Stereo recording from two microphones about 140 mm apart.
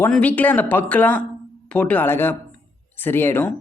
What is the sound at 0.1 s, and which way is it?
Speech, 10° left (ahead or behind).